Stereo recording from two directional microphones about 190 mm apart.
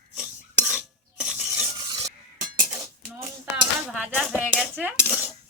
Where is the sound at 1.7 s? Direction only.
20° right (ahead or behind).